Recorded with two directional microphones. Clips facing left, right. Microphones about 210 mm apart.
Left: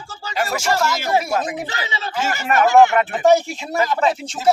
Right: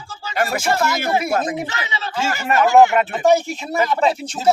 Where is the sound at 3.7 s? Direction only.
Centre (ahead or behind).